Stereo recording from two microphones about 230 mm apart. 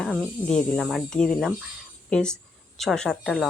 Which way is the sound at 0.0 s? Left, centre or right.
Centre.